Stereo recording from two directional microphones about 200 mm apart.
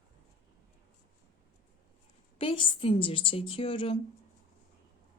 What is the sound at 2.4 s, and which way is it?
A woman's voice, 25° left (ahead or behind).